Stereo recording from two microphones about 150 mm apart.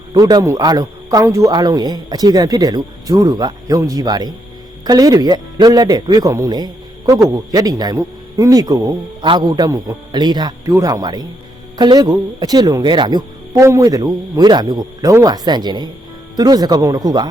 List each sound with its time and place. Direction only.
0.1 s a man's voice: 30° right (ahead or behind)